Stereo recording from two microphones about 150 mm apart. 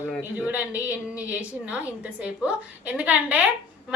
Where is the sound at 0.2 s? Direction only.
10° right (ahead or behind).